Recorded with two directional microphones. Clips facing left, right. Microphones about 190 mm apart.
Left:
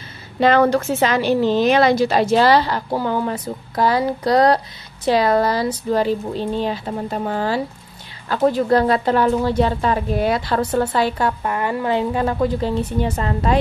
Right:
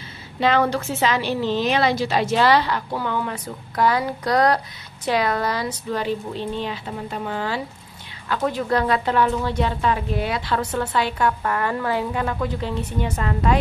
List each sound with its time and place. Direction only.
0.4 s a woman's voice: 45° left (ahead or behind)
11.4 s a woman's voice: 20° left (ahead or behind)